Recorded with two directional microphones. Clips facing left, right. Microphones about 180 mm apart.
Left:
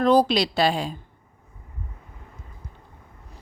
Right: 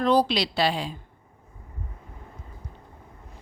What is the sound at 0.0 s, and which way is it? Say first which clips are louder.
Speech: left 3 dB; 45° left (ahead or behind).